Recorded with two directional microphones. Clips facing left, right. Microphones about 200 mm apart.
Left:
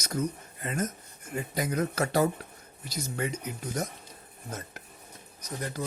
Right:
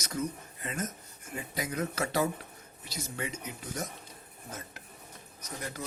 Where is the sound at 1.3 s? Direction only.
40° left (ahead or behind).